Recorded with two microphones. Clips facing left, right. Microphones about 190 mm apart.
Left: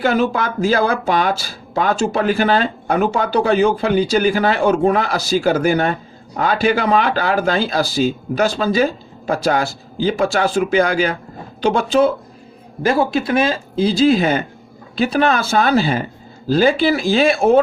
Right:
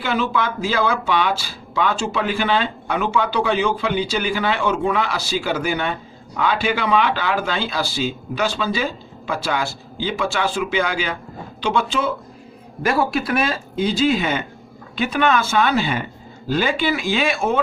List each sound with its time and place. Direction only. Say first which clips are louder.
0.0 s speech: left 5 dB; 45° left (ahead or behind)
12.8 s speech: left 3 dB; 25° left (ahead or behind)